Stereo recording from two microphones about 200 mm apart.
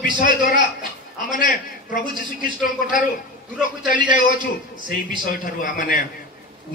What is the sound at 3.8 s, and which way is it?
A man's voice, 40° left (ahead or behind).